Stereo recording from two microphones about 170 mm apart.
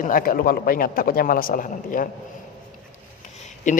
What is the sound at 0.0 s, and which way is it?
A man's voice, 55° left (ahead or behind).